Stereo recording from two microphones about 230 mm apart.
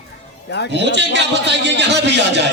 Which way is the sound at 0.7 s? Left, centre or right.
Right.